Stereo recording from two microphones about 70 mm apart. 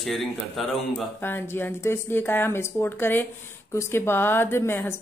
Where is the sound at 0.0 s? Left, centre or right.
Centre.